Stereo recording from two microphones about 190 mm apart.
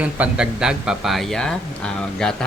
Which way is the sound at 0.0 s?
5° right (ahead or behind).